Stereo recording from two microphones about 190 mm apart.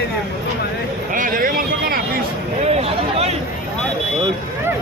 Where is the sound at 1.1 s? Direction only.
45° right (ahead or behind).